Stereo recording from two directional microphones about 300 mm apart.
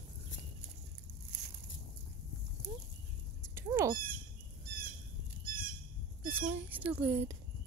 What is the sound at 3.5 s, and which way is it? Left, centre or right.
Cat, centre.